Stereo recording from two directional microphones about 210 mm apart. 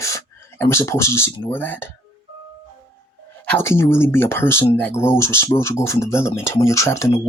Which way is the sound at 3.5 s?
10° left (ahead or behind).